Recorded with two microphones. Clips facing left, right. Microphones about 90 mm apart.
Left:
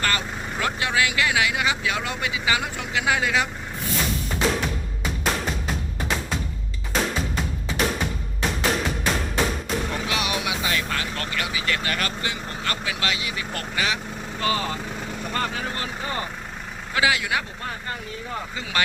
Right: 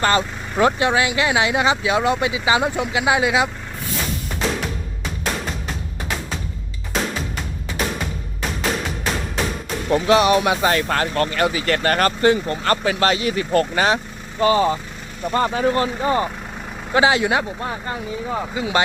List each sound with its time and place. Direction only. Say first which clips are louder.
0.0 s speech: right 7 dB; 25° right (ahead or behind)
9.9 s speech: right 12 dB; 40° right (ahead or behind)
14.4 s speech: right 9 dB; 30° right (ahead or behind)
18.3 s speech: right 9 dB; 15° right (ahead or behind)